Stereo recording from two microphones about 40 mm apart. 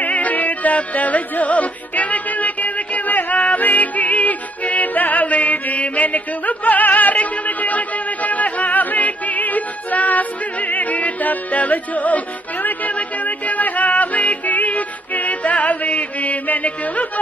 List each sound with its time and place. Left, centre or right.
0.0 s music: left